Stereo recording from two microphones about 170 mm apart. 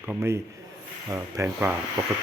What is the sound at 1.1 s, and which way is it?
Speech, 15° right (ahead or behind).